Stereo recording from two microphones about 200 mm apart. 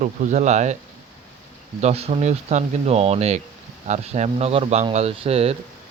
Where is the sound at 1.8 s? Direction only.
30° right (ahead or behind).